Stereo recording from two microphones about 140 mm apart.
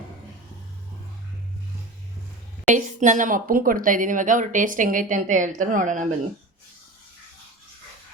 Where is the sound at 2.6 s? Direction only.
60° right (ahead or behind).